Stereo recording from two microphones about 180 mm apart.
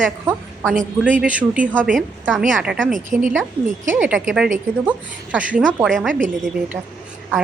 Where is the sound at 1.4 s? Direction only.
10° right (ahead or behind).